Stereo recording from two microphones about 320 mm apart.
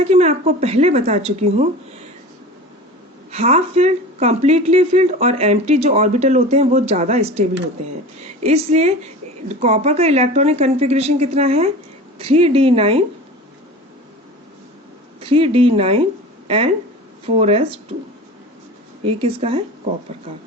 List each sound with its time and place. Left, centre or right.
0.0 s speech: centre
3.3 s speech: centre
15.2 s speech: centre
17.2 s speech: centre
19.0 s speech: centre